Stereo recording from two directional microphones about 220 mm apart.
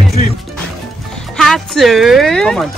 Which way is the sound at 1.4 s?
Centre (ahead or behind).